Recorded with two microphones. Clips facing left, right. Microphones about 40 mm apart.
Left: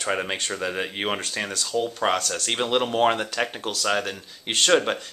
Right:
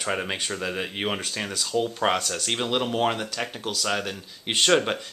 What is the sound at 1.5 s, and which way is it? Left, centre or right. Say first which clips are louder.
Speech: right 2 dB; centre.